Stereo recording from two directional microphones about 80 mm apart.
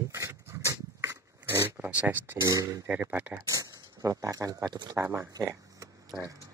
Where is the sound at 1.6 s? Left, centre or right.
Right.